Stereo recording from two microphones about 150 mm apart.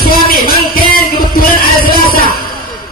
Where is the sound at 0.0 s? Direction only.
75° left (ahead or behind).